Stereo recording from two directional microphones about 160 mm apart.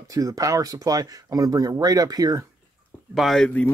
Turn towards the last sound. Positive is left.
turn(degrees=5)  # may be behind; listen again after turning